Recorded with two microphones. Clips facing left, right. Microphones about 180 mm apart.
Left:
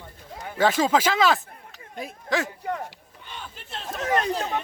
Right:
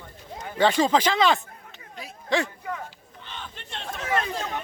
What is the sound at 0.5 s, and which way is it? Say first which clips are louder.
Speech: even; 5° left (ahead or behind).